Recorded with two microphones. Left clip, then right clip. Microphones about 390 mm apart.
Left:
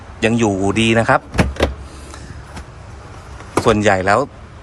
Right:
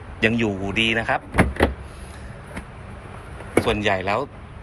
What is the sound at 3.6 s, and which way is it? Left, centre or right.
Speech, left.